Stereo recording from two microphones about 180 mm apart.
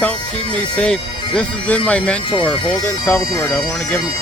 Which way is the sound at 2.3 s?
25° left (ahead or behind).